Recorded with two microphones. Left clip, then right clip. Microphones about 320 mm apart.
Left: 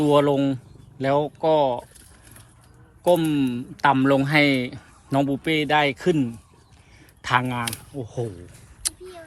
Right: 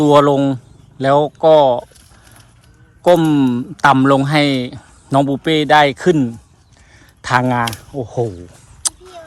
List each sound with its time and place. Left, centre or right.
0.0 s a man's voice: centre
3.0 s a man's voice: centre
8.8 s a sound: centre